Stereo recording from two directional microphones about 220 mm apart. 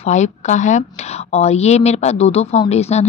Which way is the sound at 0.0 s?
30° left (ahead or behind).